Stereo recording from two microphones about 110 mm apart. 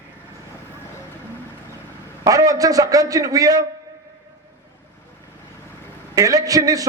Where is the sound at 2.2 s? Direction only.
35° right (ahead or behind).